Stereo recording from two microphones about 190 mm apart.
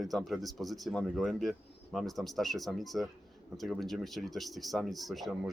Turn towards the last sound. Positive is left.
turn(degrees=0)  # may be behind; listen again after turning